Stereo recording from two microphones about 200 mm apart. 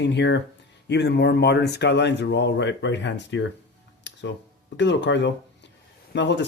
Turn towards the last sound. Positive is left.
turn(degrees=60)  # may be behind; listen again after turning